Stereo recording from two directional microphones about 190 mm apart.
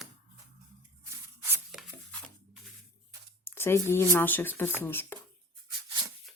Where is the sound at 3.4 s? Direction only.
15° left (ahead or behind).